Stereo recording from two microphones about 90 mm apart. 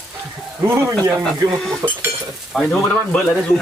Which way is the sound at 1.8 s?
40° right (ahead or behind).